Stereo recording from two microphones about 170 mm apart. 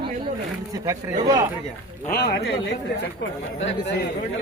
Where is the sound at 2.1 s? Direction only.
70° left (ahead or behind).